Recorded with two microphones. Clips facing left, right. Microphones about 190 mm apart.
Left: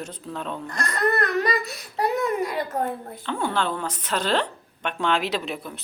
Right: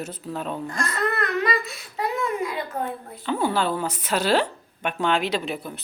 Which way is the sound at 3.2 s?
5° right (ahead or behind).